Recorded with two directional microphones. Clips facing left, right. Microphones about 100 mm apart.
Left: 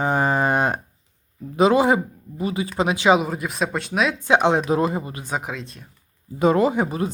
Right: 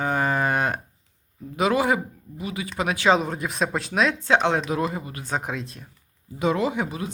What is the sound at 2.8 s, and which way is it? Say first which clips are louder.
Speech: left 3 dB; 20° left (ahead or behind).